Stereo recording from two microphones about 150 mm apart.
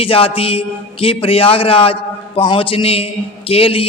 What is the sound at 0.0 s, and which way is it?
A man's voice, 40° left (ahead or behind).